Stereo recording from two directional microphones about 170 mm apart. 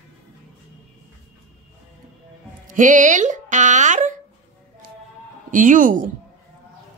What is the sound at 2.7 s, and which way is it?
Speech, 50° right (ahead or behind).